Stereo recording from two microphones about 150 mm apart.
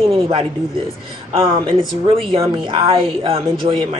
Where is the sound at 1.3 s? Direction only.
35° right (ahead or behind).